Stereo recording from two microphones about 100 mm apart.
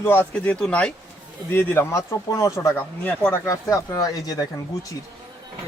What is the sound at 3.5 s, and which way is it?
Speech, 30° left (ahead or behind).